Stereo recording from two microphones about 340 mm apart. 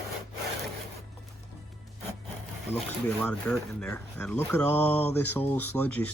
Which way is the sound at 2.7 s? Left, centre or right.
Centre.